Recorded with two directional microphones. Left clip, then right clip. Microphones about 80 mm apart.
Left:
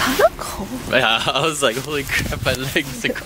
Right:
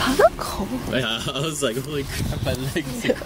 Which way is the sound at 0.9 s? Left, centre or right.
Left.